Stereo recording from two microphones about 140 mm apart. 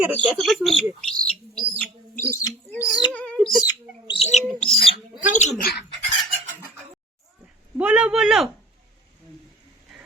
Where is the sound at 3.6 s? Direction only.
30° left (ahead or behind).